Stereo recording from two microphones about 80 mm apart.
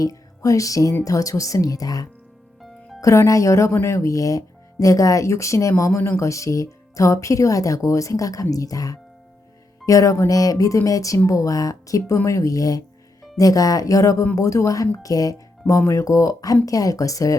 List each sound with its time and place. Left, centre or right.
0.0 s music: left
1.0 s speech: left